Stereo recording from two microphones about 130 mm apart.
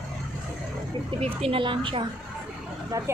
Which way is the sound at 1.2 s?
45° right (ahead or behind).